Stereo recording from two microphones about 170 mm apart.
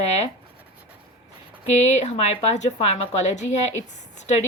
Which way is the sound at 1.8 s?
40° left (ahead or behind).